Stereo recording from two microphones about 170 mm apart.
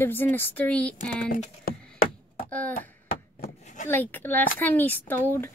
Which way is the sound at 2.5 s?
10° left (ahead or behind).